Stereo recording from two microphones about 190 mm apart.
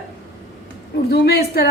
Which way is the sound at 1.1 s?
55° left (ahead or behind).